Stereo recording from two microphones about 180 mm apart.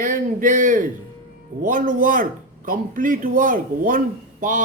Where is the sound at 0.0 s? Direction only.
45° right (ahead or behind).